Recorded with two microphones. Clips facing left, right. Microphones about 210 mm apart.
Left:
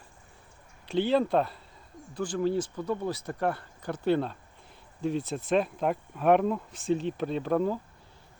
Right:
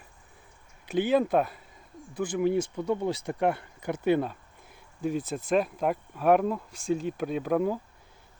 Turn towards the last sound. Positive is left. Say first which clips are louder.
# right 1 dB
turn(degrees=-10)  # may be behind; listen again after turning